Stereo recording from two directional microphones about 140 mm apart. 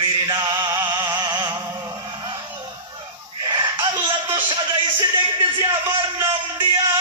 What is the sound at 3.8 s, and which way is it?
A man's voice, 35° right (ahead or behind).